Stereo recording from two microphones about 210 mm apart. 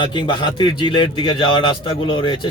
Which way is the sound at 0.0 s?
20° left (ahead or behind).